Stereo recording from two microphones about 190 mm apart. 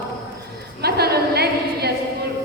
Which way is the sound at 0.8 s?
55° right (ahead or behind).